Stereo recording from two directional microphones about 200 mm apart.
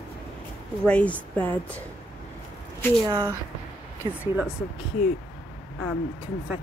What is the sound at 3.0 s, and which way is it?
Speech, 15° right (ahead or behind).